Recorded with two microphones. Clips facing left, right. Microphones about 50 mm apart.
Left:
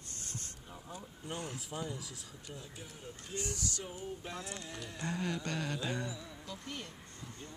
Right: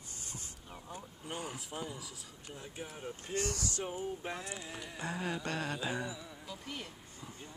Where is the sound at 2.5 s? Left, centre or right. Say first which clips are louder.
Even; centre.